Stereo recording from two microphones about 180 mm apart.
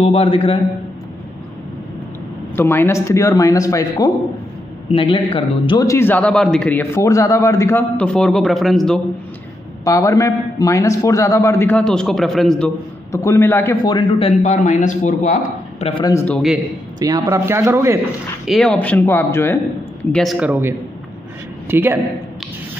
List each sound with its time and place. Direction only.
0.0 s a man's voice: 35° left (ahead or behind)
2.5 s a man's voice: 10° left (ahead or behind)
4.9 s a man's voice: 30° left (ahead or behind)
5.9 s a man's voice: 10° left (ahead or behind)
9.8 s a man's voice: 15° left (ahead or behind)
13.1 s a man's voice: 15° left (ahead or behind)
13.8 s a man's voice: 25° left (ahead or behind); by 15.9 s 45° left (ahead or behind)
15.9 s a man's voice: 25° left (ahead or behind)
16.2 s a man's voice: 10° left (ahead or behind)
17.0 s speech: 20° right (ahead or behind)
18.4 s a man's voice: centre (ahead or behind)
20.1 s speech: centre (ahead or behind)